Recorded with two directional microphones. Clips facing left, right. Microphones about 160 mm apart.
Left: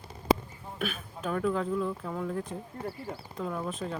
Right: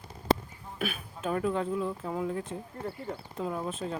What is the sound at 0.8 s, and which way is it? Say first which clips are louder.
Speech: right 1 dB; 5° right (ahead or behind).